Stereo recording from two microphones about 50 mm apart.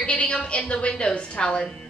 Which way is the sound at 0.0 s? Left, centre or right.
Left.